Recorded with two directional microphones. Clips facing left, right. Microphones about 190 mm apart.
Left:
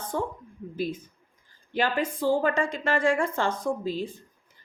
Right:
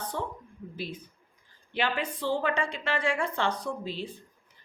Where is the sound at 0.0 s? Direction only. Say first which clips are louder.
Left 4 dB; 50° left (ahead or behind).